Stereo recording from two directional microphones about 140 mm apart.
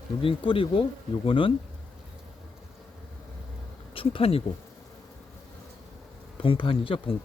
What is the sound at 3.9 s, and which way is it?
Speech, 40° left (ahead or behind).